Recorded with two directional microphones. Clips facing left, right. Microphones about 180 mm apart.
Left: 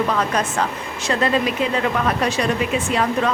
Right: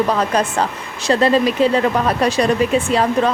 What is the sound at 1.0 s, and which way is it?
A woman's voice, 35° right (ahead or behind).